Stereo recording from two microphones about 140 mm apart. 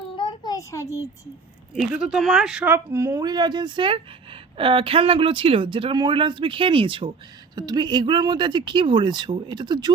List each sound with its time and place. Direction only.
0.2 s a sound: 30° left (ahead or behind)
1.7 s speech: 5° right (ahead or behind)
2.7 s speech: 20° right (ahead or behind)